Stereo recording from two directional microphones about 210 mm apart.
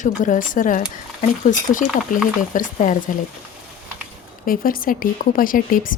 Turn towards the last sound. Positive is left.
turn(degrees=40)  # may be behind; listen again after turning